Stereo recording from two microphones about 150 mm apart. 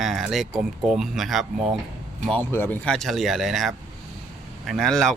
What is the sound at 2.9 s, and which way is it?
Speech, centre (ahead or behind).